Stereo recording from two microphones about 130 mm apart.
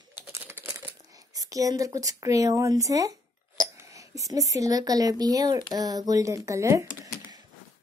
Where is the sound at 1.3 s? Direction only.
25° right (ahead or behind).